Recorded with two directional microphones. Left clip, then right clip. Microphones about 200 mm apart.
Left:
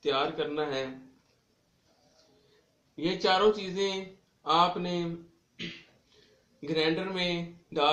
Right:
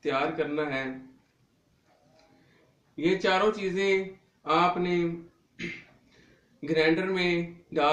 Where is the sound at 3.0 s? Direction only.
30° left (ahead or behind).